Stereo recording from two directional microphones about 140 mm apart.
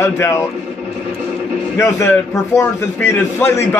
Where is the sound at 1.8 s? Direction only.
20° left (ahead or behind).